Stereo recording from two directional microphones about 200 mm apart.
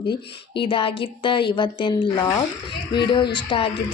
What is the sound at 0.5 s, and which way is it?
Speech, 25° left (ahead or behind).